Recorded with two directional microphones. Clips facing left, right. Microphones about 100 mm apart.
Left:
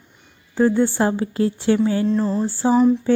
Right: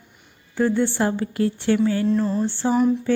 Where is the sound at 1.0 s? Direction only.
25° left (ahead or behind).